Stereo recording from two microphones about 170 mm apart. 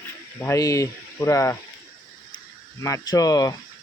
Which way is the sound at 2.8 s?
20° left (ahead or behind).